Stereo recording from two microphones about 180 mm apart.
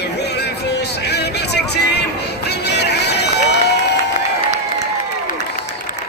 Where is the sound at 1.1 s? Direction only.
65° left (ahead or behind).